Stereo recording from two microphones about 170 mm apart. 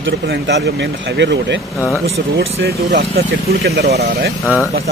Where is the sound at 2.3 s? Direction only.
70° right (ahead or behind).